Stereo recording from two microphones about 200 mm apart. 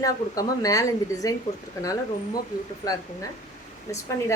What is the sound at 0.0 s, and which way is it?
A woman's voice, 15° left (ahead or behind).